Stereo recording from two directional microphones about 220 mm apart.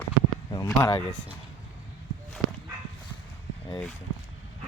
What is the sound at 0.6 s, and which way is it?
Speech, 15° left (ahead or behind).